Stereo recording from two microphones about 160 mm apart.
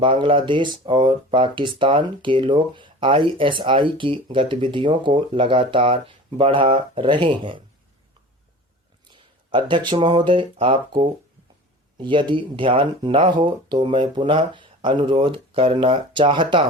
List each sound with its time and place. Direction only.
0.0 s speech: 30° right (ahead or behind)
9.1 s speech: 30° right (ahead or behind)